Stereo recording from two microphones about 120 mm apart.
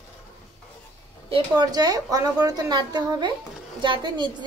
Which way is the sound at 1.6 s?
35° right (ahead or behind).